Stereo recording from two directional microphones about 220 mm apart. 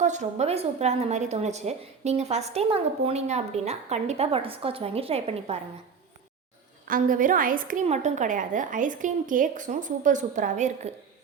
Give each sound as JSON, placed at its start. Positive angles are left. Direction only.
{"t": 0.0, "sound": "a woman's voice", "side_deg": -35}
{"t": 6.8, "sound": "a woman's voice", "side_deg": -40}